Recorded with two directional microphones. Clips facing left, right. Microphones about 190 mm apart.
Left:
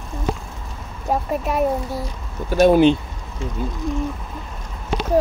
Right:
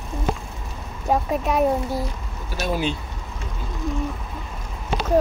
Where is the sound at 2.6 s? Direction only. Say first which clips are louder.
Left 12 dB; 55° left (ahead or behind).